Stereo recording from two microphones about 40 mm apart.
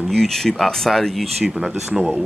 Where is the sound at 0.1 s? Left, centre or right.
Centre.